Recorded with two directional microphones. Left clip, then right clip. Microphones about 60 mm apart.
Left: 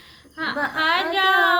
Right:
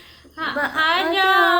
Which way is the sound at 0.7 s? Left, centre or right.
Left.